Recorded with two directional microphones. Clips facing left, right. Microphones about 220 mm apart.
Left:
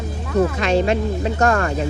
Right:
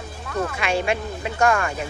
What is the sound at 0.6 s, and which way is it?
Speech, 10° right (ahead or behind).